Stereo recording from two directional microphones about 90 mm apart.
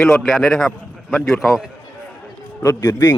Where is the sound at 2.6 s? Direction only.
25° left (ahead or behind).